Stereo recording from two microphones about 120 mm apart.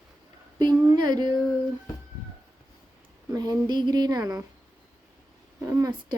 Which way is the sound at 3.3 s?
35° right (ahead or behind).